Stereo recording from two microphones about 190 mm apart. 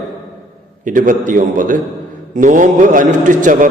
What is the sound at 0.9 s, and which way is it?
A man's voice, 45° right (ahead or behind).